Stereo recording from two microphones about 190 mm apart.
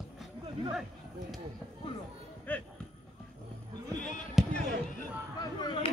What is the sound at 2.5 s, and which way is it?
Speech, 10° left (ahead or behind).